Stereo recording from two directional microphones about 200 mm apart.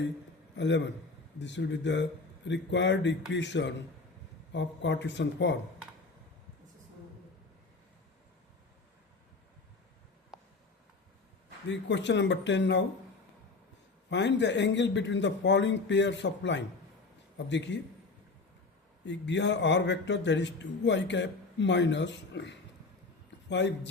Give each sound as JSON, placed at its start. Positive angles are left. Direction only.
{"t": 0.5, "sound": "a man's voice", "side_deg": 60}
{"t": 10.3, "sound": "a sound", "side_deg": 0}
{"t": 11.7, "sound": "a man's voice", "side_deg": 60}
{"t": 14.1, "sound": "a man's voice", "side_deg": 60}
{"t": 19.0, "sound": "a man's voice", "side_deg": 60}